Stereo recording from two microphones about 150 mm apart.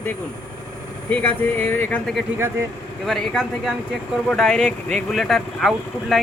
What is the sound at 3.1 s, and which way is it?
Speech, centre (ahead or behind).